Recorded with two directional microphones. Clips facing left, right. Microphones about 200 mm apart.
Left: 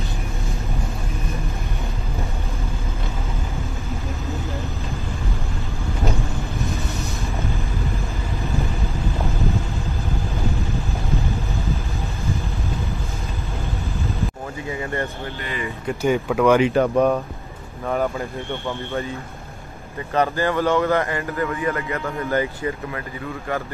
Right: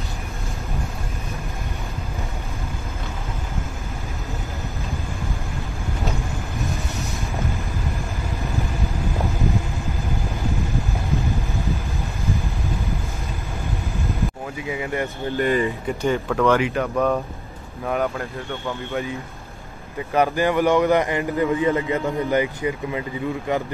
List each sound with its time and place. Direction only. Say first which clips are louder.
14.7 s a man's voice: right 1 dB; 15° right (ahead or behind)
15.3 s speech: right 11 dB; 45° right (ahead or behind)
16.0 s speech: left 2 dB; 10° left (ahead or behind)
16.6 s speech: left 5 dB; 30° left (ahead or behind)
17.8 s speech: left 1 dB; centre (ahead or behind)
20.2 s a man's voice: right 1 dB; 15° right (ahead or behind)